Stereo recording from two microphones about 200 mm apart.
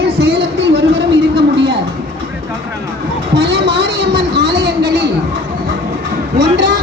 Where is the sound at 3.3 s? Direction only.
60° right (ahead or behind).